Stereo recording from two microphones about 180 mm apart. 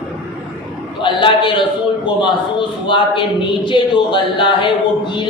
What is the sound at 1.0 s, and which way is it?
Speech, 25° left (ahead or behind).